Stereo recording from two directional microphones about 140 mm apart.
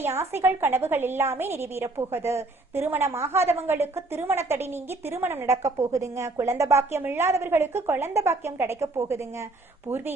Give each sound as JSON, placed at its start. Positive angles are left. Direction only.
{"t": 0.0, "sound": "a woman's voice", "side_deg": -15}